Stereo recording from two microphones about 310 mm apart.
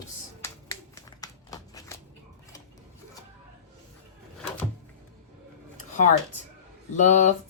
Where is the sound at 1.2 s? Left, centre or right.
Centre.